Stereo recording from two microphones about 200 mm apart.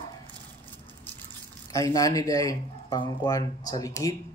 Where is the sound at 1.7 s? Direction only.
15° left (ahead or behind).